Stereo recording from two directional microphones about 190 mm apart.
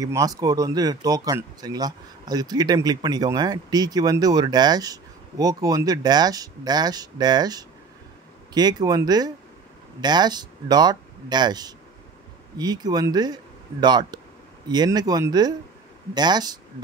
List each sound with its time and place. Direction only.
0.0 s speech: 20° right (ahead or behind)